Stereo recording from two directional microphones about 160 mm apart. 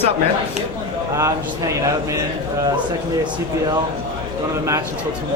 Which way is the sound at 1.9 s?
20° right (ahead or behind).